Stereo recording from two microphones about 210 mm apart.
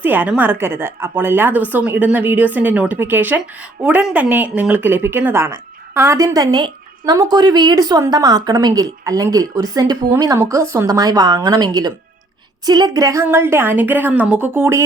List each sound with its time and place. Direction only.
0.0 s speech: 10° right (ahead or behind)